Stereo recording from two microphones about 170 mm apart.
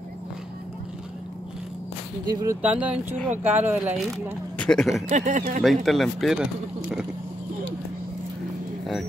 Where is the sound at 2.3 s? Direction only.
20° right (ahead or behind).